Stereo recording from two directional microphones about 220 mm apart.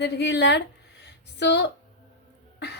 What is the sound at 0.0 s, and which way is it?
A woman's voice, 50° left (ahead or behind).